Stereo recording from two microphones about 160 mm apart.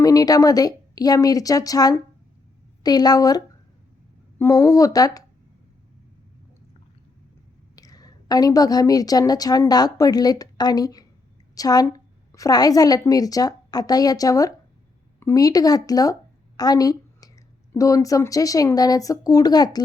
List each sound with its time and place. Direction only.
0.0 s speech: 20° left (ahead or behind)
7.8 s a woman's voice: 25° left (ahead or behind)
16.6 s a sound: 25° left (ahead or behind)
17.7 s speech: 20° left (ahead or behind)